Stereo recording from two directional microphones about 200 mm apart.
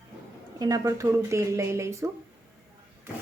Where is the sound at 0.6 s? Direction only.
15° right (ahead or behind).